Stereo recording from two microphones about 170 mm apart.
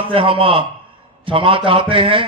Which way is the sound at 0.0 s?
30° right (ahead or behind).